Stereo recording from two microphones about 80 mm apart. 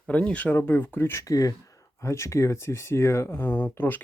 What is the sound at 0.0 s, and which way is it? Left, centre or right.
Speech, centre.